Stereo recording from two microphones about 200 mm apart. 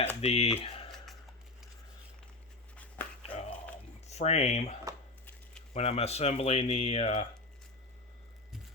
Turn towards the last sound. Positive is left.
turn(degrees=30)  # may be behind; listen again after turning